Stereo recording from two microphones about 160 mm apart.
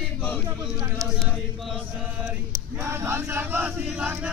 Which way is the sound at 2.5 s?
15° right (ahead or behind).